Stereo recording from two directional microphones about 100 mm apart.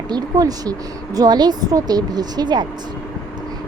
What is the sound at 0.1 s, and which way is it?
A woman's voice, 40° right (ahead or behind).